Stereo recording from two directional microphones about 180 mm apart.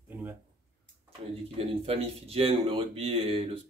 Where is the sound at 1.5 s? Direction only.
35° right (ahead or behind).